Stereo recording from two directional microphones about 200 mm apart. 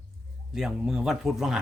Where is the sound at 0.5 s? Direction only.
Centre (ahead or behind).